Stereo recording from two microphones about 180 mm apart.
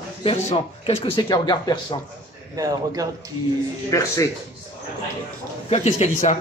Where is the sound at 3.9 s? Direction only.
15° left (ahead or behind).